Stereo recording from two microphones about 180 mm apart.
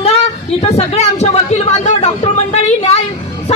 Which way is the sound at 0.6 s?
35° left (ahead or behind).